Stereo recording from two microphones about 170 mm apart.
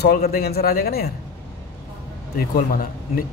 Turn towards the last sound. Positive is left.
turn(degrees=60)  # may be behind; listen again after turning